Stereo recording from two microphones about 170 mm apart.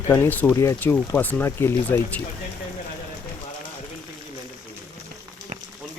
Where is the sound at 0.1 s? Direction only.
10° left (ahead or behind).